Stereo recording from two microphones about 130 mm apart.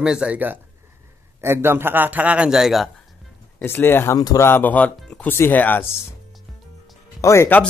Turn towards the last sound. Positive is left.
turn(degrees=20)  # may be behind; listen again after turning